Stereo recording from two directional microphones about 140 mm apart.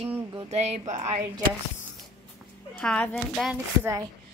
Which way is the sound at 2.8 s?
5° left (ahead or behind).